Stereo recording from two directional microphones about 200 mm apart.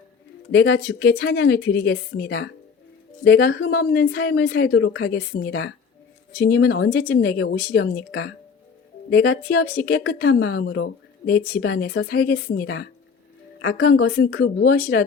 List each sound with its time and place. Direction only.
0.5 s speech: 60° left (ahead or behind)
4.7 s speech: 75° left (ahead or behind)
5.5 s a woman's voice: 55° left (ahead or behind); by 14.5 s 75° left (ahead or behind)
14.6 s a woman's voice: 50° left (ahead or behind)